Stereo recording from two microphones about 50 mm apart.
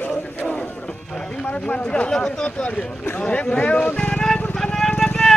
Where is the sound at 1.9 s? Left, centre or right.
Centre.